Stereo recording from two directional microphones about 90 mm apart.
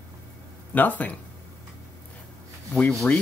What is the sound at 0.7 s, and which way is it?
Speech, 20° left (ahead or behind).